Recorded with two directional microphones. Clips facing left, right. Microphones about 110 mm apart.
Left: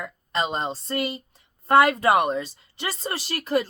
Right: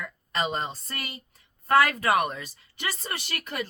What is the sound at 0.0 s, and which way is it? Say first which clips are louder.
A woman's voice: left 3 dB; 25° left (ahead or behind).